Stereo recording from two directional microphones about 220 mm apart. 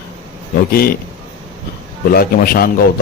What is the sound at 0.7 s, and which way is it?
Speech, 45° left (ahead or behind).